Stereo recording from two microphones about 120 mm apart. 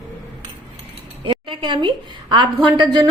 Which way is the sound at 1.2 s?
45° right (ahead or behind).